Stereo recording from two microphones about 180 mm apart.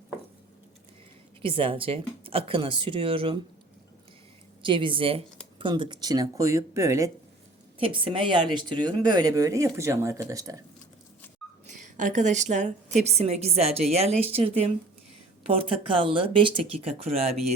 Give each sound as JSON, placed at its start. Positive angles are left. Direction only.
{"t": 1.4, "sound": "speech", "side_deg": -30}
{"t": 4.6, "sound": "speech", "side_deg": -25}
{"t": 7.8, "sound": "speech", "side_deg": -30}
{"t": 11.8, "sound": "a woman's voice", "side_deg": -45}